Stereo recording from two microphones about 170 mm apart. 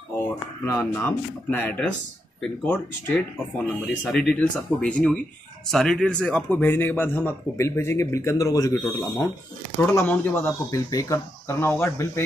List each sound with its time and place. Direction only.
0.7 s a man's voice: 15° left (ahead or behind)
3.5 s a man's voice: 5° left (ahead or behind)